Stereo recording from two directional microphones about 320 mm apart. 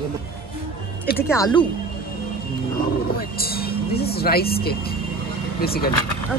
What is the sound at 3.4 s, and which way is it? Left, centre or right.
Speech, left.